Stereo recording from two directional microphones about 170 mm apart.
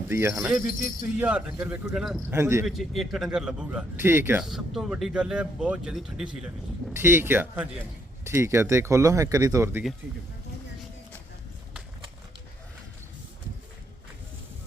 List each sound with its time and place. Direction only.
0.1 s a man's voice: 15° right (ahead or behind)
2.3 s speech: 15° right (ahead or behind)
2.6 s a man's voice: centre (ahead or behind)
4.4 s a man's voice: centre (ahead or behind)
6.9 s speech: 15° right (ahead or behind)